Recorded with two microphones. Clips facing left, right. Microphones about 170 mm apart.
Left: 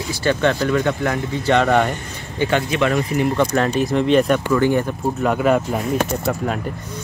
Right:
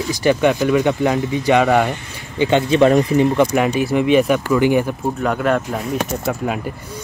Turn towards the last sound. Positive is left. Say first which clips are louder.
# even
turn(degrees=-5)  # may be behind; listen again after turning